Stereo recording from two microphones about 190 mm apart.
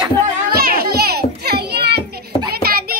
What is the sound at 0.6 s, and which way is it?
Children playing, 55° right (ahead or behind).